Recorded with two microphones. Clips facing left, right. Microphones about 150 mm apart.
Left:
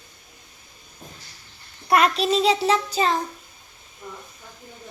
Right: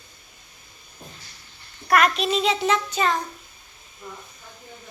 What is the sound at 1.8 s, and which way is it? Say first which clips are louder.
A child's voice: left 1 dB; 25° left (ahead or behind).